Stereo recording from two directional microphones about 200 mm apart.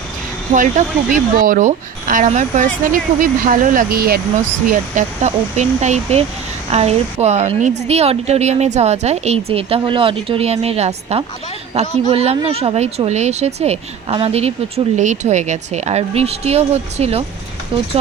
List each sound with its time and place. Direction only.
0.5 s a woman's voice: 35° right (ahead or behind)
4.7 s a woman's voice: 35° right (ahead or behind)